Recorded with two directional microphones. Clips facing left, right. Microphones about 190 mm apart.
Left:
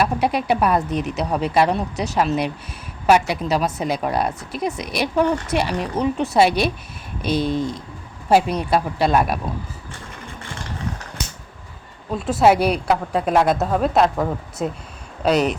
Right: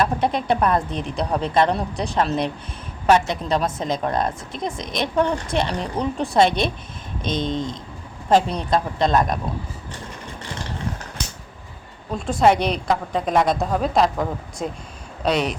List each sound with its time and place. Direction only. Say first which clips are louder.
0.0 s a woman's voice: left 1 dB; 10° left (ahead or behind)
0.9 s a woman's voice: left 4 dB; 30° right (ahead or behind)
1.1 s a woman's voice: even; 10° left (ahead or behind)
12.1 s a woman's voice: left 2 dB; 5° left (ahead or behind)